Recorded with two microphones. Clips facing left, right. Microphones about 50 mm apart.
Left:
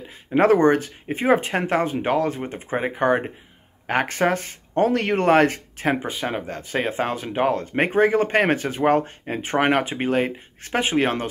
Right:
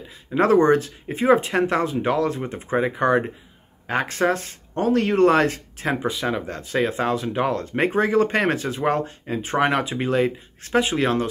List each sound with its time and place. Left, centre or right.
0.3 s speech: left
2.4 s speech: centre
2.8 s speech: left
6.2 s speech: left